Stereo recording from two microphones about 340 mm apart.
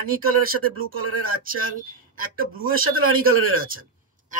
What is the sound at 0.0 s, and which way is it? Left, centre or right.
Speech, right.